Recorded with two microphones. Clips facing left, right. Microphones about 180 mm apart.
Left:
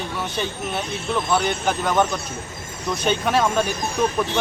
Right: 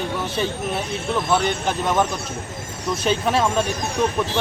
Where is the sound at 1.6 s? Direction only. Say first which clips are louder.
Even; centre (ahead or behind).